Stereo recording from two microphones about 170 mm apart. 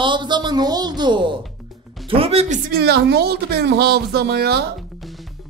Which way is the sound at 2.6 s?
70° right (ahead or behind).